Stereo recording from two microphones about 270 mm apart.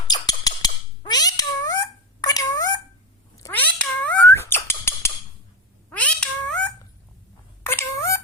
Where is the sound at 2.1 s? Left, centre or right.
Centre.